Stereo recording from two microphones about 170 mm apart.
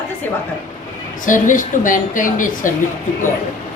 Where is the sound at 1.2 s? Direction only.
50° left (ahead or behind).